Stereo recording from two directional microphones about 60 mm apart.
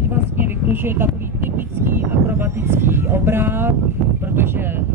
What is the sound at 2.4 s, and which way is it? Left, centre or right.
Speech, right.